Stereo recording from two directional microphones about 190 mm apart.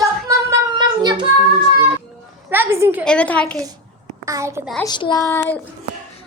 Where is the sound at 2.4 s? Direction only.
10° right (ahead or behind).